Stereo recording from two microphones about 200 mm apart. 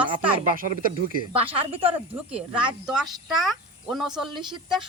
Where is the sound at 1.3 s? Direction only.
25° right (ahead or behind).